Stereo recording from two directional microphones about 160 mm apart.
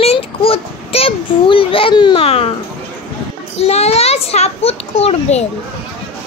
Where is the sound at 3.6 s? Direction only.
40° left (ahead or behind).